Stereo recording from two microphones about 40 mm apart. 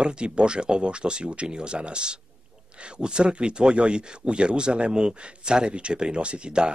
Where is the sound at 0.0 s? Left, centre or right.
Right.